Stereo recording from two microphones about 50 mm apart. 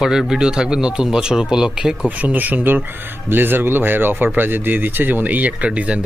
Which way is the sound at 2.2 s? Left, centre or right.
Right.